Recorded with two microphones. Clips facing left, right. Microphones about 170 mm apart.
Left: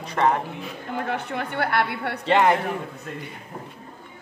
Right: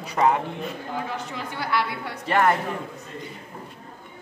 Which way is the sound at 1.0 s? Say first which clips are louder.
Left 4 dB; 60° left (ahead or behind).